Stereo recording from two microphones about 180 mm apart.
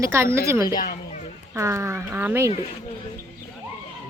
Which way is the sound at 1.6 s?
15° right (ahead or behind).